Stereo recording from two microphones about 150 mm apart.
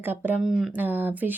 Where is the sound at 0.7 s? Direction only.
10° right (ahead or behind).